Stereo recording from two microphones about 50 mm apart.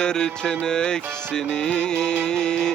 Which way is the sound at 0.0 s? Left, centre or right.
Centre.